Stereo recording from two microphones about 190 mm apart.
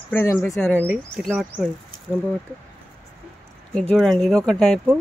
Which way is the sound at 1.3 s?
5° right (ahead or behind).